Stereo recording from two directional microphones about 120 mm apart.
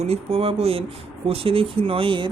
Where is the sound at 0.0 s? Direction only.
60° right (ahead or behind).